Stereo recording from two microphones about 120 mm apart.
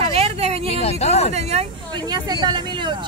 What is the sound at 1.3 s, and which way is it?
Speech, 65° right (ahead or behind).